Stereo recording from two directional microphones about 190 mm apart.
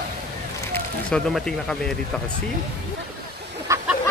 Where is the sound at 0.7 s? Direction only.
5° left (ahead or behind).